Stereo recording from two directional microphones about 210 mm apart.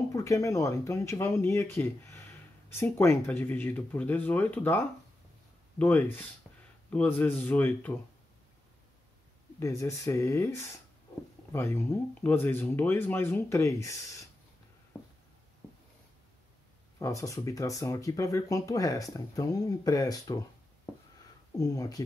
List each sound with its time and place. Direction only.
0.1 s speech: 15° left (ahead or behind)
9.6 s speech: 15° left (ahead or behind)
14.9 s a sound: 10° left (ahead or behind)
17.0 s speech: 15° left (ahead or behind)
21.5 s speech: 15° left (ahead or behind)